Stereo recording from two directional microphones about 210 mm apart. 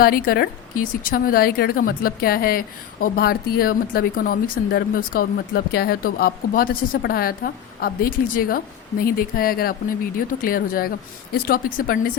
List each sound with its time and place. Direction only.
0.0 s a woman's voice: 45° left (ahead or behind)